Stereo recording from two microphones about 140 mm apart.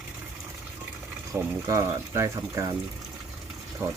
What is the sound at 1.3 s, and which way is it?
Speech, 20° right (ahead or behind).